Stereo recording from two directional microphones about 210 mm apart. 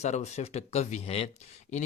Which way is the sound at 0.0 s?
30° left (ahead or behind).